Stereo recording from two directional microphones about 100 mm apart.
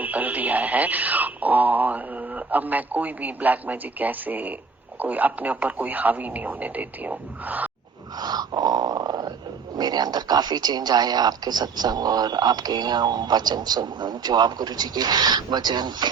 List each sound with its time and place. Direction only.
0.0 s speech: 15° right (ahead or behind)
8.2 s dog: 40° right (ahead or behind)
9.7 s speech: 45° right (ahead or behind)